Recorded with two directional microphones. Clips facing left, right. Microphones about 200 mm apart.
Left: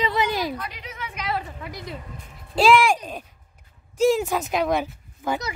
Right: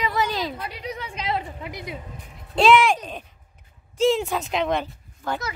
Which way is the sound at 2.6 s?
10° left (ahead or behind).